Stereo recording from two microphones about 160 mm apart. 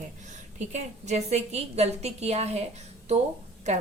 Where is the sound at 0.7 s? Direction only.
45° right (ahead or behind).